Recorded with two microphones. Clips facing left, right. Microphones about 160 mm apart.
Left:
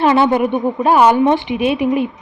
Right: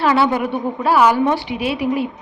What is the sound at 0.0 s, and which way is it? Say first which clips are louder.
A woman's voice: left 3 dB; 20° left (ahead or behind).